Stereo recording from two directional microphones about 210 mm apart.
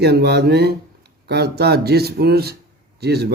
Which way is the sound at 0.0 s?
50° right (ahead or behind).